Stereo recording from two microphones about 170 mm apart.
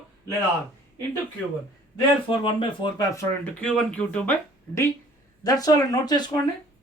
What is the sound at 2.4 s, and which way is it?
Speech, 30° left (ahead or behind).